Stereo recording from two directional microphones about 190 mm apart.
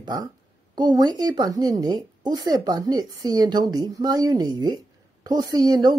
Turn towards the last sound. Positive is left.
turn(degrees=-20)  # may be behind; listen again after turning